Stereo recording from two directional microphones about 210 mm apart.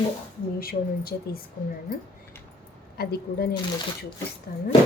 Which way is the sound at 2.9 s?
50° left (ahead or behind).